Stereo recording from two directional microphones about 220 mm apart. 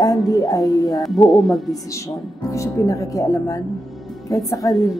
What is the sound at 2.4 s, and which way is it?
A woman's voice, 15° left (ahead or behind).